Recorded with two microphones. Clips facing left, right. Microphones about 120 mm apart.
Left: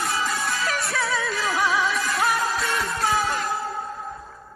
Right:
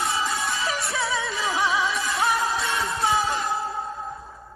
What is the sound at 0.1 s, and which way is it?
Music, 25° right (ahead or behind).